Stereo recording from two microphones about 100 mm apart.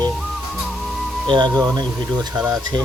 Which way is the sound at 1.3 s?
50° right (ahead or behind).